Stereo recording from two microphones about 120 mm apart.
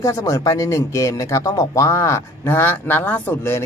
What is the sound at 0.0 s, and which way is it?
Speech, 30° left (ahead or behind).